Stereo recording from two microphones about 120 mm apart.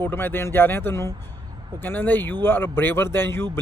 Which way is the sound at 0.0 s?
20° left (ahead or behind).